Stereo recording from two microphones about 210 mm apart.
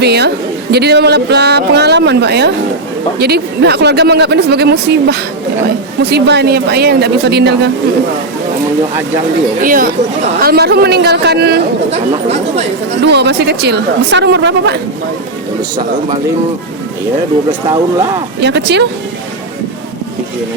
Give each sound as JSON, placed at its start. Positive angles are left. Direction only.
{"t": 0.0, "sound": "speech", "side_deg": -50}
{"t": 9.6, "sound": "speech", "side_deg": -40}
{"t": 13.0, "sound": "speech", "side_deg": -55}
{"t": 18.3, "sound": "speech", "side_deg": -55}